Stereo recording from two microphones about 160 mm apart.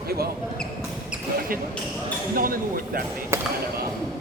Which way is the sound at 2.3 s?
60° right (ahead or behind).